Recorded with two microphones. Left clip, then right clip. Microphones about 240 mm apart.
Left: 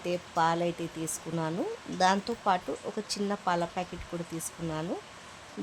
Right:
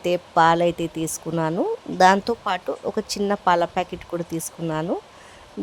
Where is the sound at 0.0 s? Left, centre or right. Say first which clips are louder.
Right 10 dB; right.